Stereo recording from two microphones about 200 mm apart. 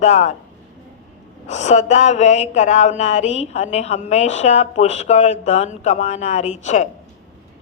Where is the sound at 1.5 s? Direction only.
35° left (ahead or behind).